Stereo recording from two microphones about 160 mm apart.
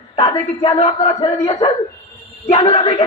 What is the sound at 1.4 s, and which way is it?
A man's voice, 30° left (ahead or behind).